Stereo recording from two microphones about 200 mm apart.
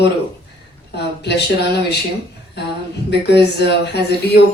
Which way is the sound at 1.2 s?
55° left (ahead or behind).